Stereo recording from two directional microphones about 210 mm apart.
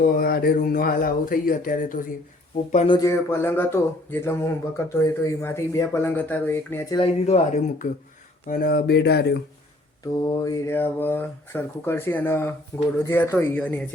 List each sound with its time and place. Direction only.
0.0 s speech: 45° left (ahead or behind)
2.7 s speech: 25° left (ahead or behind)
7.0 s speech: 30° left (ahead or behind)
8.4 s speech: 45° left (ahead or behind)
10.4 s speech: 10° left (ahead or behind)